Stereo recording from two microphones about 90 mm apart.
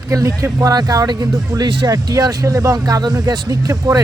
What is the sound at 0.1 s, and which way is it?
Speech, 35° right (ahead or behind).